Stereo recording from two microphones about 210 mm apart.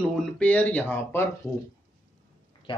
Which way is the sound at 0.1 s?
5° left (ahead or behind).